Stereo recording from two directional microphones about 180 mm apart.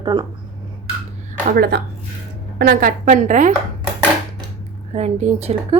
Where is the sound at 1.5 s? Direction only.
60° right (ahead or behind).